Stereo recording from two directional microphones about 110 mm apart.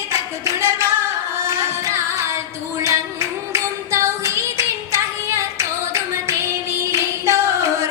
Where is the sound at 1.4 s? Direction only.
25° right (ahead or behind).